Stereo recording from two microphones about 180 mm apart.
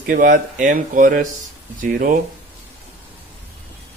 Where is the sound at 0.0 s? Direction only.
50° right (ahead or behind).